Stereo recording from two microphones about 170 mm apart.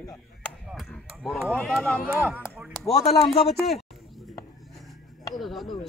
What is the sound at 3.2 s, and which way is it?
Speech, 35° left (ahead or behind).